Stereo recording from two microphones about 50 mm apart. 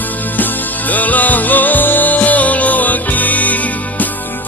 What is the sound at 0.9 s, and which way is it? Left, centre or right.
Music, left.